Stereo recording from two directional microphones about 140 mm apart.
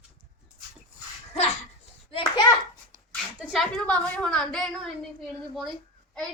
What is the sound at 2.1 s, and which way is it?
Speech, 35° left (ahead or behind).